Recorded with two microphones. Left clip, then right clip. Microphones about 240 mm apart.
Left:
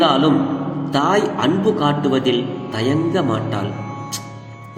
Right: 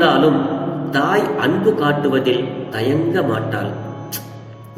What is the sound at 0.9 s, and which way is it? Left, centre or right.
Speech, left.